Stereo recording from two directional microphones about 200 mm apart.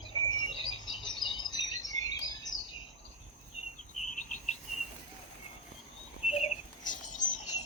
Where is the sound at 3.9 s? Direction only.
40° left (ahead or behind).